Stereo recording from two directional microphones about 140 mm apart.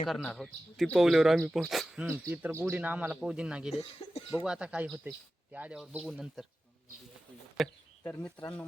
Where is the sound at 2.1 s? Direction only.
15° right (ahead or behind).